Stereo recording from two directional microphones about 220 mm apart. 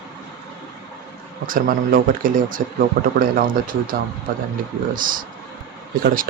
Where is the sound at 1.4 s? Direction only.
40° right (ahead or behind).